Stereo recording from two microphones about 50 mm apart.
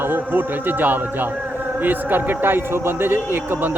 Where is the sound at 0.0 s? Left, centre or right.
Right.